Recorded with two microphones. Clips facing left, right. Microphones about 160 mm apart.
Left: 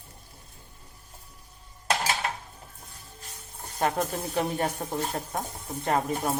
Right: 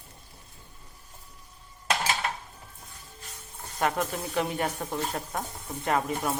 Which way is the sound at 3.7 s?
30° left (ahead or behind).